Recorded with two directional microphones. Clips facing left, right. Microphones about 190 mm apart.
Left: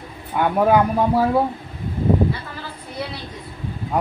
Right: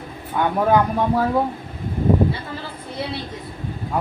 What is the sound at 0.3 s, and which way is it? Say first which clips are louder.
Speech: left 1 dB; 10° left (ahead or behind).